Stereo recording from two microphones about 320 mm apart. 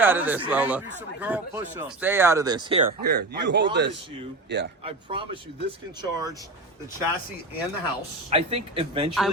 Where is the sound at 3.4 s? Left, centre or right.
Right.